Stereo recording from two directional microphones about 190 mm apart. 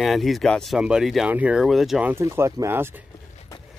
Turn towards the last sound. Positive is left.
turn(degrees=-10)  # may be behind; listen again after turning